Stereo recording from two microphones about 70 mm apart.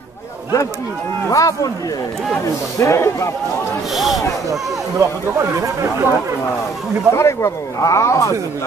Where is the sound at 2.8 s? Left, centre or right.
Left.